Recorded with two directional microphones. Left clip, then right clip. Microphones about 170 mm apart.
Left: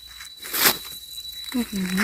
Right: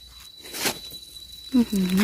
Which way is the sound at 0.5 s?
40° left (ahead or behind).